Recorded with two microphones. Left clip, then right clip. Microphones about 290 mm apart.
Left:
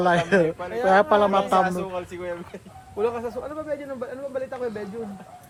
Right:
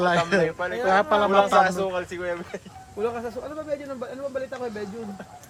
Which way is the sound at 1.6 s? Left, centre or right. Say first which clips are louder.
Right 3 dB; right.